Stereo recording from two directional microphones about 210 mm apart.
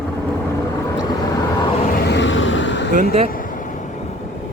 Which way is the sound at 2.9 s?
30° right (ahead or behind).